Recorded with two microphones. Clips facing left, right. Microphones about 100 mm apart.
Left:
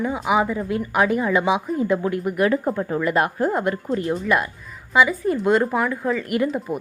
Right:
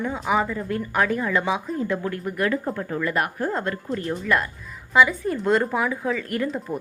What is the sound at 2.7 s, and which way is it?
A woman's voice, 20° left (ahead or behind).